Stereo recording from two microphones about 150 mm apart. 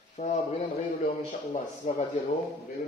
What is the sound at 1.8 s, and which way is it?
Speech, 45° left (ahead or behind).